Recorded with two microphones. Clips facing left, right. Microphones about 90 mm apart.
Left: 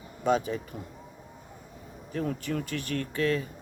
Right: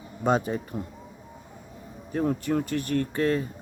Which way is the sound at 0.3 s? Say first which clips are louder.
Right 2 dB; 40° right (ahead or behind).